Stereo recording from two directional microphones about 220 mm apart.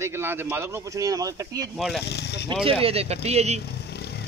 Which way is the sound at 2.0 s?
50° left (ahead or behind).